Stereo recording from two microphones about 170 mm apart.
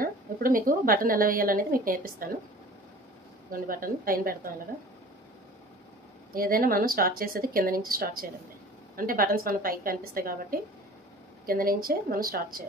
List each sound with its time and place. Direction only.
0.0 s a woman's voice: 55° right (ahead or behind)
3.5 s a woman's voice: 55° right (ahead or behind)
6.3 s a woman's voice: 55° right (ahead or behind)